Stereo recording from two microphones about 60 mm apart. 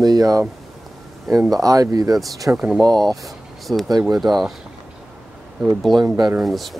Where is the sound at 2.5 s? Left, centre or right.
Right.